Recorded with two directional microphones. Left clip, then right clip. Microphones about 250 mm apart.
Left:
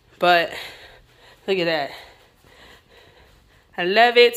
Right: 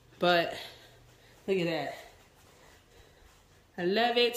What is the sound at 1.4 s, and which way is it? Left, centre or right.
Speech, centre.